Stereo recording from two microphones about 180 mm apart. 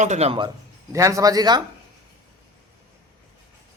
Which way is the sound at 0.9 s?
15° right (ahead or behind).